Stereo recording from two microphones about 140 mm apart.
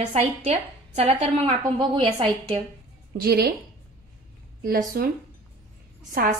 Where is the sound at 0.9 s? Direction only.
45° right (ahead or behind).